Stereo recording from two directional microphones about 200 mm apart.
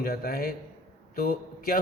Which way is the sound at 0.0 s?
50° left (ahead or behind).